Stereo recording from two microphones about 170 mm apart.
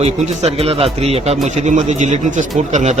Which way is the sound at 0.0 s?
35° right (ahead or behind).